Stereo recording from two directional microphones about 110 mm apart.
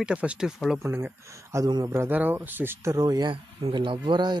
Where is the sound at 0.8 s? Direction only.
20° right (ahead or behind).